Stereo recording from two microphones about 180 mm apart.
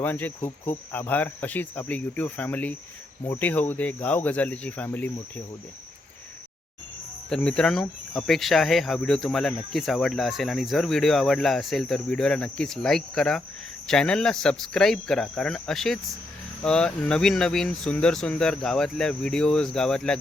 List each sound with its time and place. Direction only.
0.0 s cricket: 10° left (ahead or behind)
7.3 s speech: 5° left (ahead or behind)